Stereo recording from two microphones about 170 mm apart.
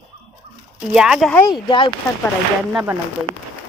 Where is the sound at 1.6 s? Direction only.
30° left (ahead or behind).